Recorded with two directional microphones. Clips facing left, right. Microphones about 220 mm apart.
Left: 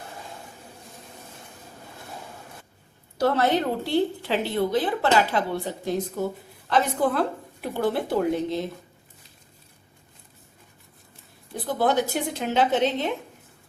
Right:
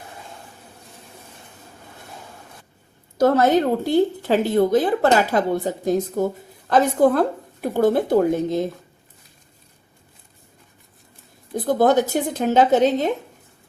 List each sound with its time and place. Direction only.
3.2 s a woman's voice: 45° right (ahead or behind)
11.5 s a woman's voice: 45° right (ahead or behind)